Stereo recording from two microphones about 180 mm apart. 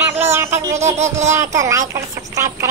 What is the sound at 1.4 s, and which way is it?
Speech, 15° right (ahead or behind).